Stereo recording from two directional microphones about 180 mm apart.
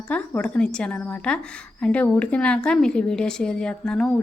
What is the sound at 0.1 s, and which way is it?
A woman's voice, 5° left (ahead or behind).